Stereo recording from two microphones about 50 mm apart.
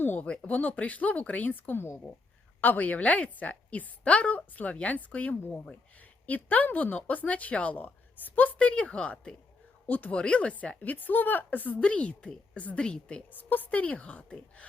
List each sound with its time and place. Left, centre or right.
0.0 s a woman's voice: left
2.6 s speech: left
9.8 s speech: left
11.8 s a woman's voice: left
13.3 s a woman's voice: left